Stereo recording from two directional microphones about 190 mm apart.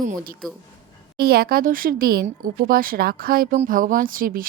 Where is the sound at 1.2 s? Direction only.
55° right (ahead or behind).